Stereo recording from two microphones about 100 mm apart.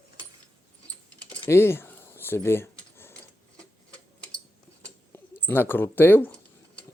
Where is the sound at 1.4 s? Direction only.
25° left (ahead or behind).